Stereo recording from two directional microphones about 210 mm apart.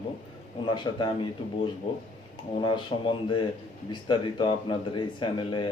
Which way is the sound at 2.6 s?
25° left (ahead or behind).